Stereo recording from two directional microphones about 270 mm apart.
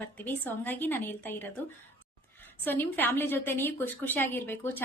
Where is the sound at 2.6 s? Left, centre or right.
Centre.